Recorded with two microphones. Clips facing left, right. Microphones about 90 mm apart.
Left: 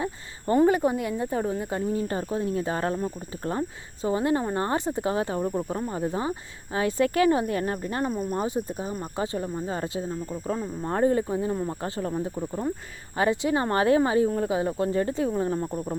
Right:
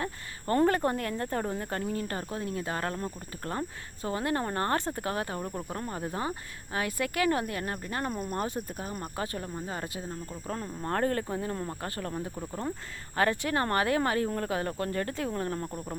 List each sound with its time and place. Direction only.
0.0 s speech: 15° left (ahead or behind)
6.7 s speech: 30° left (ahead or behind)
8.1 s speech: centre (ahead or behind)
8.4 s speech: 15° left (ahead or behind)
12.4 s speech: 5° left (ahead or behind)
13.1 s speech: 15° left (ahead or behind)